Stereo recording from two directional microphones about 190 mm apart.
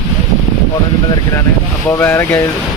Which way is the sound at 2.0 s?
10° left (ahead or behind).